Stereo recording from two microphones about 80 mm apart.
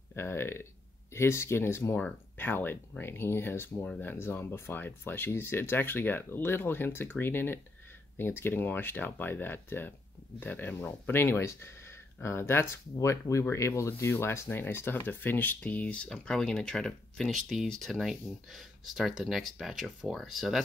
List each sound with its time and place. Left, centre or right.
0.1 s speech: left; by 20.6 s centre